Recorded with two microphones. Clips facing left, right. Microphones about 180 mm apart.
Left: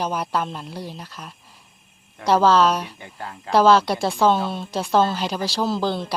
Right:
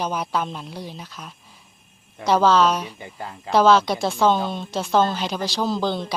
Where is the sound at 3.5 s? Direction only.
5° left (ahead or behind).